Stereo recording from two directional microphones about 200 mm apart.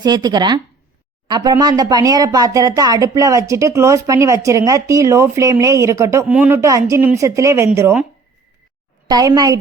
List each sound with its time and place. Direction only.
0.0 s speech: 20° right (ahead or behind)
9.0 s speech: 20° right (ahead or behind)